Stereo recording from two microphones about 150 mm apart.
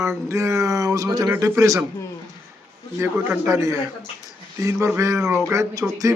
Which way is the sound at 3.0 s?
20° right (ahead or behind).